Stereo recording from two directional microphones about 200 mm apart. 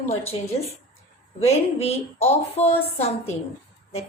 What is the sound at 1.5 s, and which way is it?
A woman's voice, 30° left (ahead or behind).